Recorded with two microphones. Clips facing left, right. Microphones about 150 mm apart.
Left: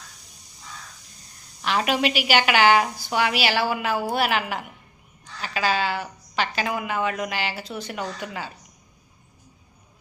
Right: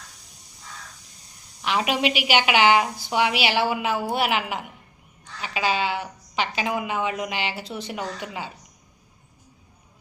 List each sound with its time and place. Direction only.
1.6 s a woman's voice: 15° right (ahead or behind)